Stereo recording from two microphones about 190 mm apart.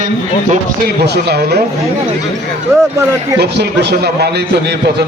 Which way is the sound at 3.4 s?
60° right (ahead or behind).